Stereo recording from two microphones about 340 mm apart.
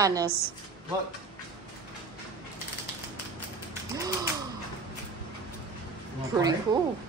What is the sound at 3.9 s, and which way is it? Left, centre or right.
Mechanisms, centre.